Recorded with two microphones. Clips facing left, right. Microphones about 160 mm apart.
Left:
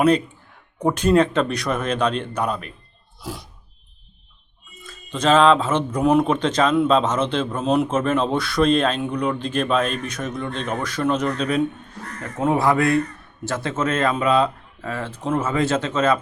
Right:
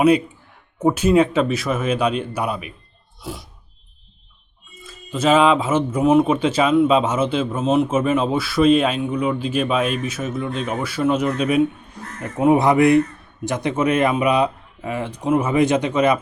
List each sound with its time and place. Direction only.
0.8 s speech: 5° right (ahead or behind)
3.2 s music: centre (ahead or behind)
4.8 s speech: 5° right (ahead or behind)